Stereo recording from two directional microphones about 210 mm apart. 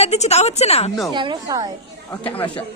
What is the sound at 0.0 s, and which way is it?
Speech, 30° left (ahead or behind).